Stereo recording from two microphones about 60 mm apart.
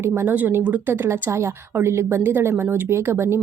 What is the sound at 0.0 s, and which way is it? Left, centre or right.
Speech, right.